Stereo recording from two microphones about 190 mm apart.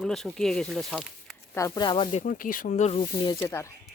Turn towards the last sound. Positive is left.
turn(degrees=15)  # may be behind; listen again after turning